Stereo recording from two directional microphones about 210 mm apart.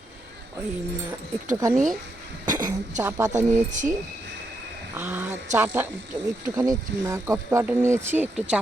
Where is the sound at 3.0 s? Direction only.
10° right (ahead or behind).